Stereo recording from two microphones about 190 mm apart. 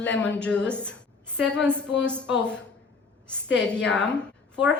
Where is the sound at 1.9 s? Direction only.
70° left (ahead or behind).